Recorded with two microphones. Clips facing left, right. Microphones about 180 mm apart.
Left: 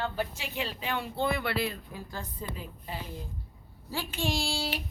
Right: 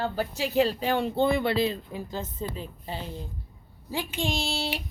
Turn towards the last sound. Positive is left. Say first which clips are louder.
# right 2 dB
turn(degrees=-20)  # may be behind; listen again after turning